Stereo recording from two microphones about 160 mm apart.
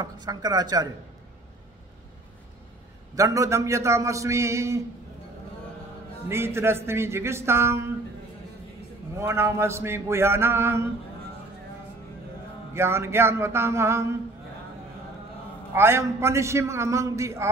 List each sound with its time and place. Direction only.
0.0 s a man's voice: 25° right (ahead or behind)
3.2 s a man's voice: 20° right (ahead or behind)
6.2 s a man's voice: 15° right (ahead or behind)
9.2 s a man's voice: 15° right (ahead or behind)
12.7 s a man's voice: 15° right (ahead or behind)
15.7 s a man's voice: 15° right (ahead or behind)